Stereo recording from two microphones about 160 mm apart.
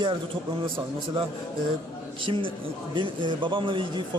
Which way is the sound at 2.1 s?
30° right (ahead or behind).